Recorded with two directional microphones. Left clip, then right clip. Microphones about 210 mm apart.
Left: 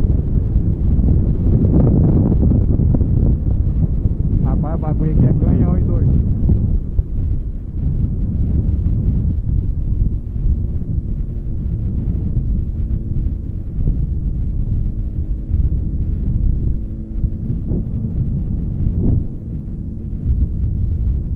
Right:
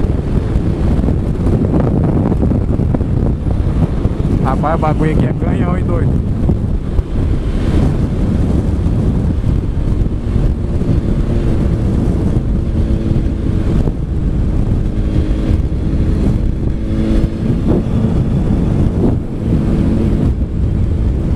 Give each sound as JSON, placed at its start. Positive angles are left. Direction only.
{"t": 1.7, "sound": "wind noise", "side_deg": -20}
{"t": 4.4, "sound": "speech", "side_deg": -20}